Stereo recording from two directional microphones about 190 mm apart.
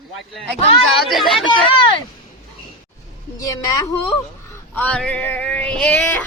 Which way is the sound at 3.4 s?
20° left (ahead or behind).